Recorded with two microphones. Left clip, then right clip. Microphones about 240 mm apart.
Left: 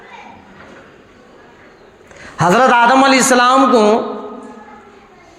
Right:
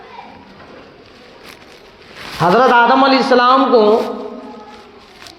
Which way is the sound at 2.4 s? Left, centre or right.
Left.